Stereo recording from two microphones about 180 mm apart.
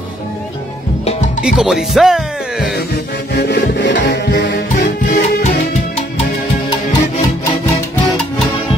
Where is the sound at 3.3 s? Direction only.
65° left (ahead or behind).